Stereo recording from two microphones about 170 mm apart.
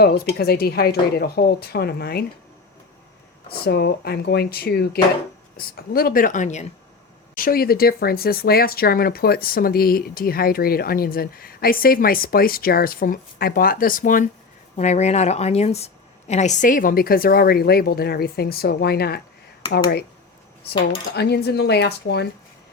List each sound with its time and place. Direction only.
0.3 s speech: 65° left (ahead or behind)
3.5 s speech: 70° left (ahead or behind); by 6.7 s 45° left (ahead or behind)
7.3 s speech: 60° left (ahead or behind)
14.8 s speech: 40° left (ahead or behind); by 19.2 s 70° left (ahead or behind)
21.2 s speech: 75° left (ahead or behind)